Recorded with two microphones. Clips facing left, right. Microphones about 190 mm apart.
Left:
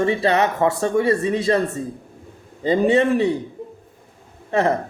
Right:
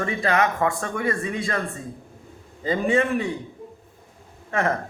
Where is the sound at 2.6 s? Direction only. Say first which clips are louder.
Left 5 dB; 25° left (ahead or behind).